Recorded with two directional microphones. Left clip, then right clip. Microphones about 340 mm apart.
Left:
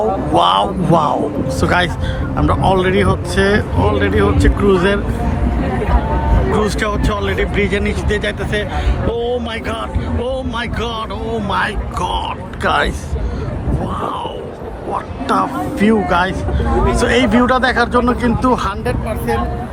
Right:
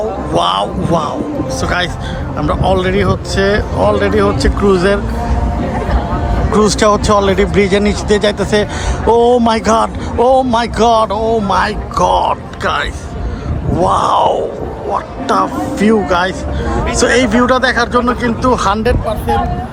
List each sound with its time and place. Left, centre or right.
0.3 s speech: centre
6.5 s speech: centre
13.8 s speech: centre
18.7 s speech: right